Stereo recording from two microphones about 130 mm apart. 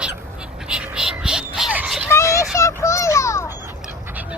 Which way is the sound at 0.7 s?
5° right (ahead or behind).